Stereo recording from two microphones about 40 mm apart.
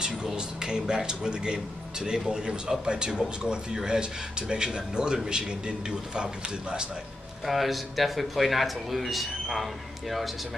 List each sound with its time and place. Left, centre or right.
0.2 s speech: centre
7.4 s speech: centre